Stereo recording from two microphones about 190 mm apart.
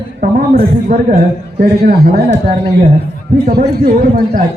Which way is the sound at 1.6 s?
55° right (ahead or behind).